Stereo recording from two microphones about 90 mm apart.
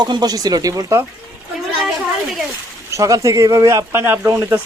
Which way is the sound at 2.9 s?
40° right (ahead or behind).